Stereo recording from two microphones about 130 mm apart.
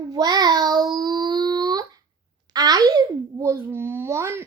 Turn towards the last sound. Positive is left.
turn(degrees=-20)  # may be behind; listen again after turning